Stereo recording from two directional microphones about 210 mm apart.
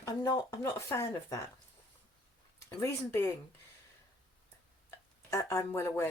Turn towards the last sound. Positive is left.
turn(degrees=10)  # may be behind; listen again after turning